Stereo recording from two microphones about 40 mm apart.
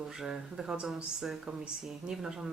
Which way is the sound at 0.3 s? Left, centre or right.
Right.